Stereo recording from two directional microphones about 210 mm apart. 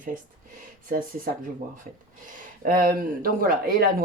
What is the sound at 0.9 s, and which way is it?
Speech, 40° right (ahead or behind).